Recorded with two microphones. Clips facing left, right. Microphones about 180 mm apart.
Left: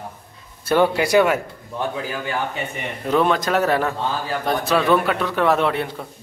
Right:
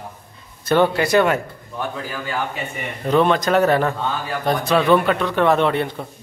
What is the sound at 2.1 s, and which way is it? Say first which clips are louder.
Speech: left 1 dB; 20° left (ahead or behind).